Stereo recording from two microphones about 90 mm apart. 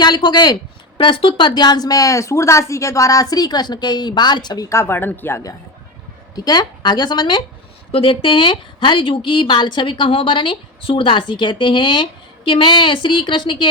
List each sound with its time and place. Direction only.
0.0 s speech: 55° left (ahead or behind)
0.9 s speech: 70° left (ahead or behind); by 4.7 s 50° left (ahead or behind)
4.7 s speech: 25° left (ahead or behind)
6.3 s speech: 50° left (ahead or behind)
7.9 s speech: 85° left; by 13.7 s 60° left (ahead or behind)